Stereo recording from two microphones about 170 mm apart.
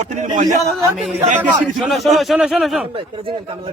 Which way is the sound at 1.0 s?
5° right (ahead or behind).